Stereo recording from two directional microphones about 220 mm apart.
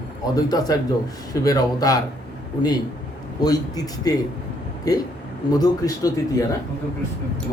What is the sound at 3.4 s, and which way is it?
Speech, 15° left (ahead or behind).